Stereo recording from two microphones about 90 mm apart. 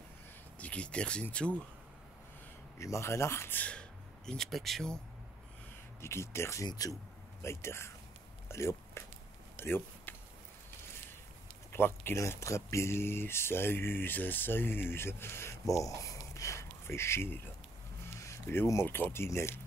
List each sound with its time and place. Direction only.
0.6 s speech: 15° left (ahead or behind)
2.8 s speech: 30° left (ahead or behind); by 3.8 s 15° left (ahead or behind)
4.3 s speech: centre (ahead or behind)
5.9 s speech: 30° left (ahead or behind)
6.7 s speech: 45° left (ahead or behind)
7.4 s speech: 30° left (ahead or behind)
9.6 s a sound: 25° left (ahead or behind)
11.7 s speech: 25° left (ahead or behind)